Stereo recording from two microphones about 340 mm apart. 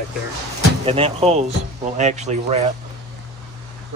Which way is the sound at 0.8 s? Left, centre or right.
Centre.